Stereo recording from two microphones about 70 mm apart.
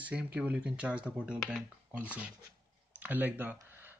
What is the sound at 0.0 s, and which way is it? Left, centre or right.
Speech, centre.